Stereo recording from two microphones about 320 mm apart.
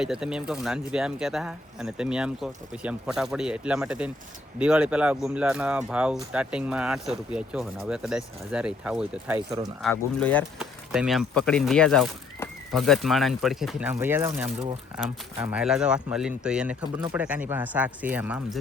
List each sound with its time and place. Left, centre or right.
0.0 s speech: centre
9.8 s speech: centre